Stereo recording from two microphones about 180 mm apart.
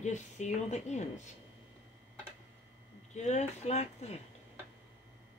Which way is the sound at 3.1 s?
40° left (ahead or behind).